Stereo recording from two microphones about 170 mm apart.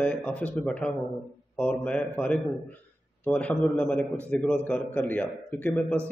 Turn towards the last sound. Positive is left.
turn(degrees=10)  # may be behind; listen again after turning